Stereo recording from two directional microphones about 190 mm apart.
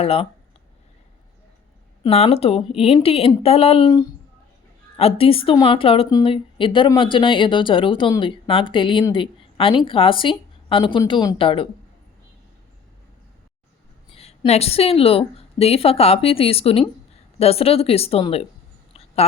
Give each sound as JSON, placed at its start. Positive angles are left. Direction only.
{"t": 0.0, "sound": "speech", "side_deg": 30}
{"t": 2.0, "sound": "a woman's voice", "side_deg": 30}
{"t": 14.2, "sound": "a woman's voice", "side_deg": 35}